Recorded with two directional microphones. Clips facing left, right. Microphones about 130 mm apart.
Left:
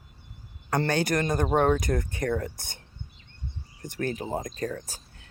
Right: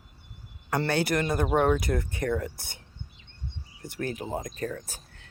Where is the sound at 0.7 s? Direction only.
40° left (ahead or behind).